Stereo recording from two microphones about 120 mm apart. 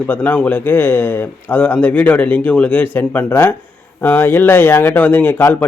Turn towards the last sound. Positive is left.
turn(degrees=20)  # may be behind; listen again after turning